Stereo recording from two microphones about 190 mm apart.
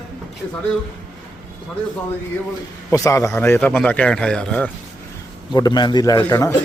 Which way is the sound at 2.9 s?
15° left (ahead or behind).